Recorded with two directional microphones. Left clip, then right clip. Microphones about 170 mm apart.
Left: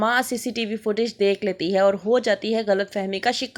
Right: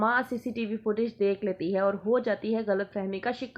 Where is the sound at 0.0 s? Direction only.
30° left (ahead or behind).